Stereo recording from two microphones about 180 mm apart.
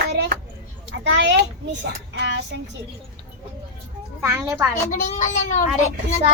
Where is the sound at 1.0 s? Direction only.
75° right (ahead or behind).